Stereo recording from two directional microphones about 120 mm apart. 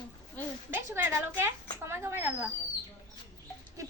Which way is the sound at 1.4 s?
20° right (ahead or behind).